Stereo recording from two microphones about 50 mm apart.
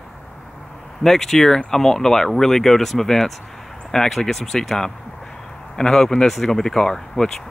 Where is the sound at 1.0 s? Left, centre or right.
Centre.